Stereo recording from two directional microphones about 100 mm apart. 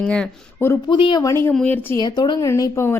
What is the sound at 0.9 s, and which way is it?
Speech, 50° left (ahead or behind).